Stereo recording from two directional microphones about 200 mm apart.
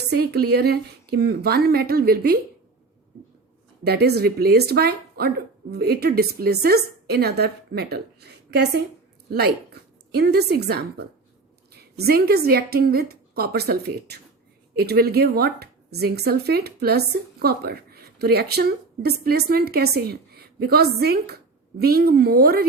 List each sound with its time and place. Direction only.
0.1 s speech: 55° right (ahead or behind)
3.8 s speech: 55° right (ahead or behind)
10.1 s a woman's voice: 55° right (ahead or behind)